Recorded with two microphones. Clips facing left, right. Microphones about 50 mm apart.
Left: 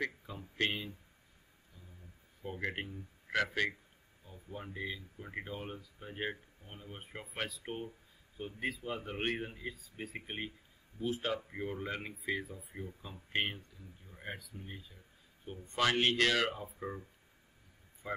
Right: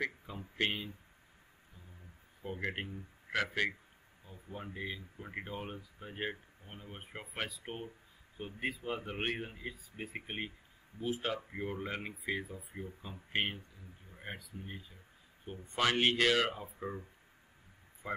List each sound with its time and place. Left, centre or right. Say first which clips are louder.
0.0 s speech: right 1 dB; centre
2.4 s speech: even; centre
5.9 s speech: even; centre
18.0 s speech: right 1 dB; right